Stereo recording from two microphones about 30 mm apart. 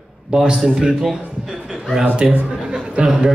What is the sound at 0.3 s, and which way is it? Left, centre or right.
Speech, right.